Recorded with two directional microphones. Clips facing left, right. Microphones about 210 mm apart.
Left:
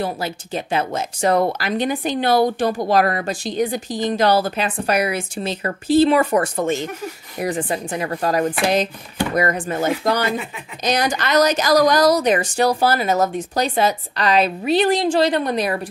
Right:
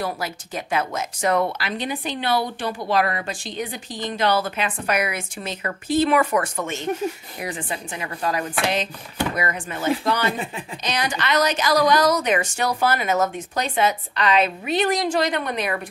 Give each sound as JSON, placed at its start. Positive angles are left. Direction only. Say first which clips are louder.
{"t": 0.0, "sound": "speech", "louder": "left 3 dB", "side_deg": 30}